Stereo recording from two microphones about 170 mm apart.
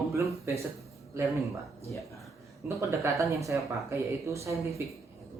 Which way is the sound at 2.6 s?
15° right (ahead or behind).